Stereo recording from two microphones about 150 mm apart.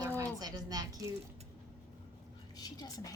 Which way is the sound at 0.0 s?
25° right (ahead or behind).